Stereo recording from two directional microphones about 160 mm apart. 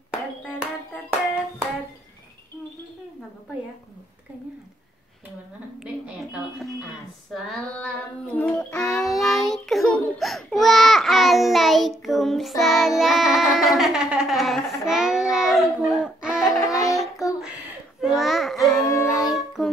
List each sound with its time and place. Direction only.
6.0 s a sound: 5° right (ahead or behind)
7.3 s child singing: centre (ahead or behind)
16.6 s child singing: 20° left (ahead or behind)
17.0 s child singing: centre (ahead or behind)
18.9 s music: 15° left (ahead or behind)
19.2 s music: centre (ahead or behind)